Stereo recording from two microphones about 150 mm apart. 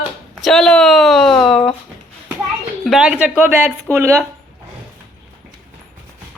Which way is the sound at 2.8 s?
5° right (ahead or behind).